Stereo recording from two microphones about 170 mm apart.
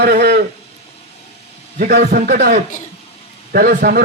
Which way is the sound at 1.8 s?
60° right (ahead or behind).